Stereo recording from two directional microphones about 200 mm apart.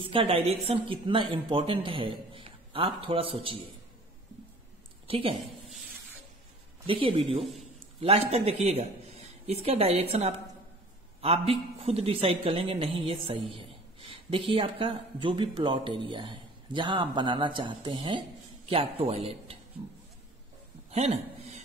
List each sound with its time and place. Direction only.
0.0 s a man's voice: 25° right (ahead or behind)
5.0 s a woman's voice: 30° right (ahead or behind)
6.9 s a man's voice: 25° right (ahead or behind)
20.9 s a sound: 35° right (ahead or behind)